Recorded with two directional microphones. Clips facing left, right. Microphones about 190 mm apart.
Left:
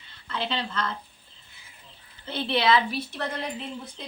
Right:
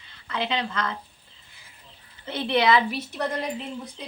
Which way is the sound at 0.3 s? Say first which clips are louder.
Right 3 dB; 15° right (ahead or behind).